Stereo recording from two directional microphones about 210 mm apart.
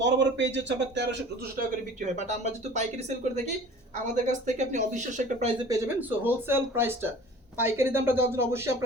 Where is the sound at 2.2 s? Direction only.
35° right (ahead or behind).